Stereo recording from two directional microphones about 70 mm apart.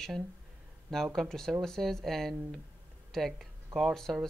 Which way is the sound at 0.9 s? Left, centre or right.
Centre.